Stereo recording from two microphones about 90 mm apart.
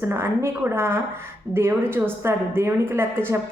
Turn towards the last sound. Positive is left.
turn(degrees=-25)  # may be behind; listen again after turning